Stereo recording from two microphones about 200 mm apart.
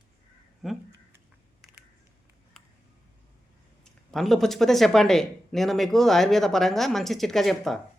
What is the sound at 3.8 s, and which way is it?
Speech, centre (ahead or behind).